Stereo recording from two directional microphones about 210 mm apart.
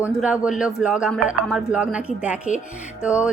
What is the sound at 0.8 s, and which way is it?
A woman's voice, 5° right (ahead or behind).